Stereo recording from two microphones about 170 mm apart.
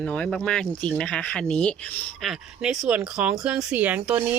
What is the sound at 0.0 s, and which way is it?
Speech, 5° left (ahead or behind).